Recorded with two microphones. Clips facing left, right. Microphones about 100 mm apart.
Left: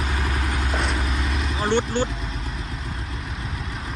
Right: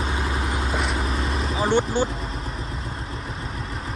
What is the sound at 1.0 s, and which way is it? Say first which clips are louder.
Vehicle: right 2 dB; 35° right (ahead or behind).